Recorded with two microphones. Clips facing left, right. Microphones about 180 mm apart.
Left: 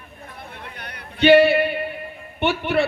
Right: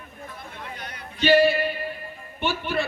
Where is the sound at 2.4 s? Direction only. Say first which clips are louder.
Left 6 dB; 65° left (ahead or behind).